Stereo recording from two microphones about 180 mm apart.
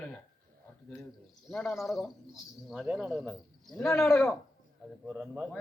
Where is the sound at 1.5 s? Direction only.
Centre (ahead or behind).